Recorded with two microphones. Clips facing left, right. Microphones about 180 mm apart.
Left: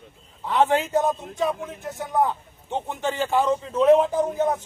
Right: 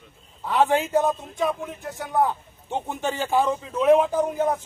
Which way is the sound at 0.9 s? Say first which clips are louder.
Even; centre (ahead or behind).